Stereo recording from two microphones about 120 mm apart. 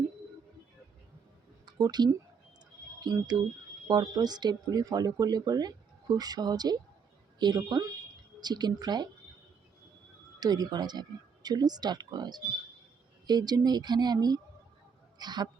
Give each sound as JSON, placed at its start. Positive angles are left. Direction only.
{"t": 1.6, "sound": "speech", "side_deg": -35}
{"t": 10.4, "sound": "speech", "side_deg": -35}